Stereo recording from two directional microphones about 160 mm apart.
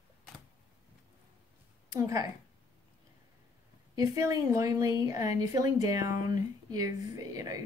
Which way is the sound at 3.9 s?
20° right (ahead or behind).